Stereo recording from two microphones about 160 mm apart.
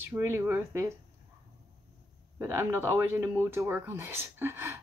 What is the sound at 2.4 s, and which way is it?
Speech, 15° right (ahead or behind).